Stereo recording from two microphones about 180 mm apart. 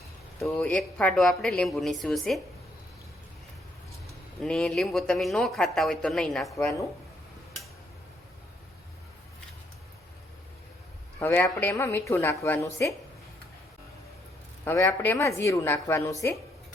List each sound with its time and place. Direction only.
0.4 s speech: 10° left (ahead or behind)
4.4 s speech: 5° left (ahead or behind)
11.2 s a woman's voice: 10° left (ahead or behind)
14.6 s a woman's voice: 15° left (ahead or behind)